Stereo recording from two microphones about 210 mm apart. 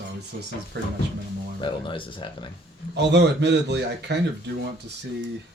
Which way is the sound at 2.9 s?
55° right (ahead or behind).